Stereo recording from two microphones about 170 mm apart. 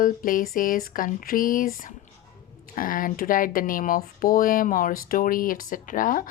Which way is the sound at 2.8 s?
55° left (ahead or behind).